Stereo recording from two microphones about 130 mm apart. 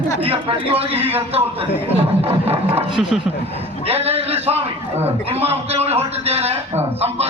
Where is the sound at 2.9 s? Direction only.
5° right (ahead or behind).